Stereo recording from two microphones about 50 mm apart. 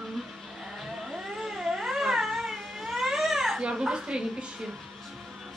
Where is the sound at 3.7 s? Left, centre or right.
Centre.